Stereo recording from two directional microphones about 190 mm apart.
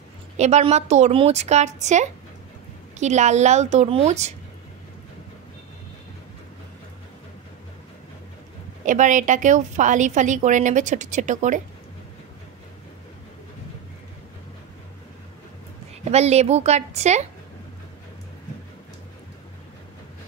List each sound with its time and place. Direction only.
0.4 s a woman's voice: 35° right (ahead or behind)
8.8 s a woman's voice: 40° right (ahead or behind)
16.0 s a woman's voice: 35° right (ahead or behind)